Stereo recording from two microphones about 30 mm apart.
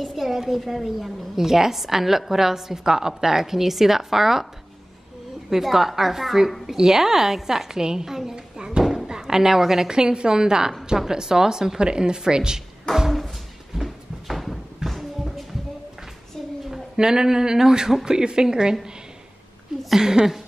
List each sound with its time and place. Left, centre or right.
0.1 s a sound: centre
0.6 s a woman's voice: centre
5.5 s a woman's voice: centre
8.5 s a sound: right
9.8 s speech: right
12.9 s a sound: left
13.7 s music: centre
16.9 s speech: right
20.0 s speech: centre